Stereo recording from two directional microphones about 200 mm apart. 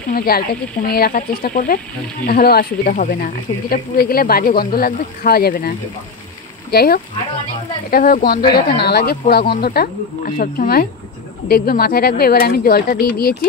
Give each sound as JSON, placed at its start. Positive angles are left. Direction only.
{"t": 0.1, "sound": "speech", "side_deg": 45}